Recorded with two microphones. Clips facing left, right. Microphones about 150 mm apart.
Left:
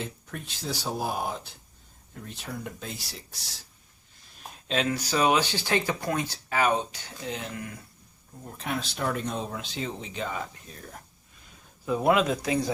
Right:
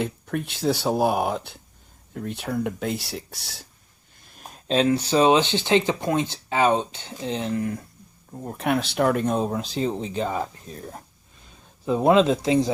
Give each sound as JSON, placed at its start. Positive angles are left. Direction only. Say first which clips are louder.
{"t": 0.0, "sound": "speech", "louder": "right 10 dB", "side_deg": -65}
{"t": 4.7, "sound": "speech", "louder": "right 7 dB", "side_deg": -30}
{"t": 8.5, "sound": "speech", "louder": "right 9 dB", "side_deg": -65}